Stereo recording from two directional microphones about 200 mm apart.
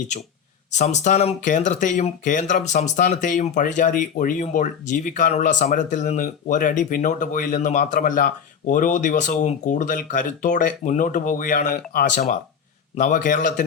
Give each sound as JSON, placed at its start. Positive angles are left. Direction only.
{"t": 0.7, "sound": "speech", "side_deg": 35}